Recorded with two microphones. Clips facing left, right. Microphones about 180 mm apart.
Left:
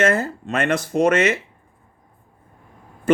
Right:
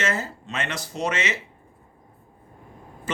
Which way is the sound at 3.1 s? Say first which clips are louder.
Left 14 dB; 55° left (ahead or behind).